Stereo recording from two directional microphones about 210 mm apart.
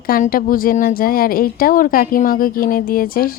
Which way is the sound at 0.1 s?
45° left (ahead or behind).